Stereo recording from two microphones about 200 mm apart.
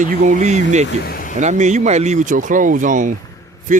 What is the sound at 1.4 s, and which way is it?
Speech, 35° right (ahead or behind).